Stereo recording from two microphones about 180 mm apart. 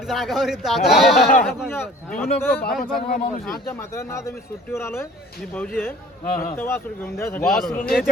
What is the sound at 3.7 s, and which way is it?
Speech, 15° left (ahead or behind).